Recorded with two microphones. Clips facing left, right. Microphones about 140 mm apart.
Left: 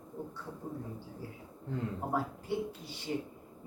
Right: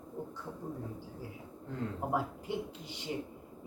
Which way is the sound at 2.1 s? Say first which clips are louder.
Left 1 dB; 15° right (ahead or behind).